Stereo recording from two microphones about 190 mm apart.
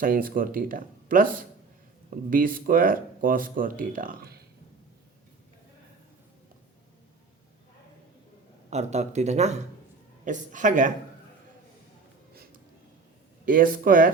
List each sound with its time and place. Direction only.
0.0 s speech: 45° right (ahead or behind)
2.3 s speech: 45° right (ahead or behind)
8.7 s speech: 35° right (ahead or behind)
13.4 s speech: 45° right (ahead or behind)